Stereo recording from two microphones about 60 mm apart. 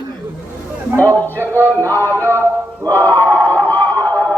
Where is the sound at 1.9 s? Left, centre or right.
Left.